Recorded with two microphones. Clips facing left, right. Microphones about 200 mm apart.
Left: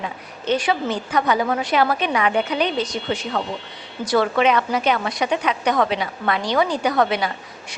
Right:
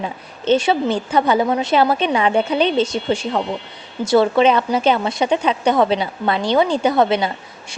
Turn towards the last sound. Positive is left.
turn(degrees=-25)  # may be behind; listen again after turning